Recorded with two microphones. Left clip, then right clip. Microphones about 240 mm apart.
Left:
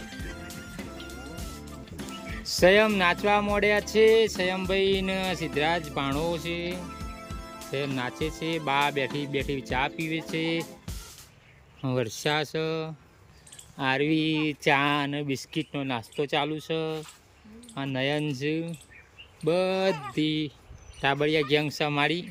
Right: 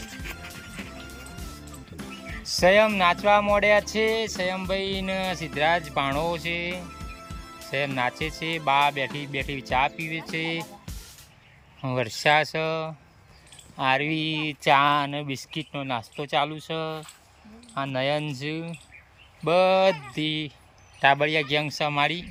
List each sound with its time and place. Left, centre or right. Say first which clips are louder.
2.0 s speech: even; centre
11.8 s speech: right 3 dB; centre